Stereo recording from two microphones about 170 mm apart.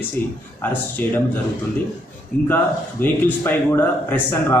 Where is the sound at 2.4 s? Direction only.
10° left (ahead or behind).